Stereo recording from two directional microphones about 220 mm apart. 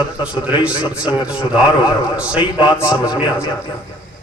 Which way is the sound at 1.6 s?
20° left (ahead or behind).